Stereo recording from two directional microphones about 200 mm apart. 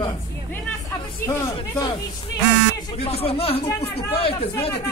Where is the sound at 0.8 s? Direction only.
15° left (ahead or behind).